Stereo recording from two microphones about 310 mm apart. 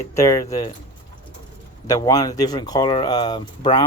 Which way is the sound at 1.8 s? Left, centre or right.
Centre.